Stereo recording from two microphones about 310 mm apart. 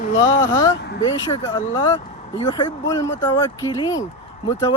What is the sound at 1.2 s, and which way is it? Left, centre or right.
Speech, centre.